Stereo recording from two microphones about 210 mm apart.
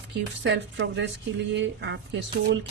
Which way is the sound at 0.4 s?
60° right (ahead or behind).